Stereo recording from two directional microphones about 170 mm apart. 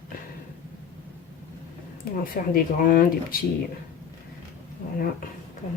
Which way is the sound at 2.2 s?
55° left (ahead or behind).